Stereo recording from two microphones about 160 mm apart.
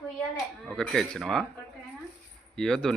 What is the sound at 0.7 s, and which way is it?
Speech, 5° left (ahead or behind).